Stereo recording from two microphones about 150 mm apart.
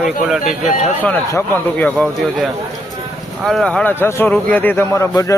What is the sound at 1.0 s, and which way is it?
Speech, 10° left (ahead or behind).